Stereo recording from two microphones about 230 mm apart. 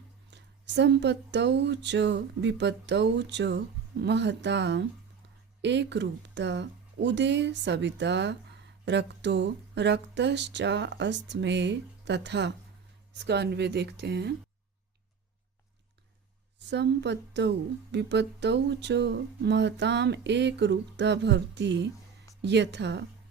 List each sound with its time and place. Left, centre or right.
0.3 s speech: right
16.6 s speech: right